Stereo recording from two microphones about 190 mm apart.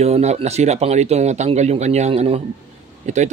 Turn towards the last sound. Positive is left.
turn(degrees=-40)  # may be behind; listen again after turning